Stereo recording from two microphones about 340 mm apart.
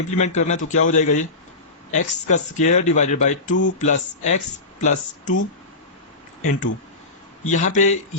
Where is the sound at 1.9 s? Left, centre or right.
Left.